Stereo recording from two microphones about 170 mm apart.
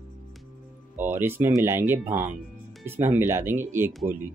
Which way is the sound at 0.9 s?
10° right (ahead or behind).